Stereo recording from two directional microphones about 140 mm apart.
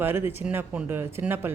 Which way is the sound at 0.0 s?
15° right (ahead or behind).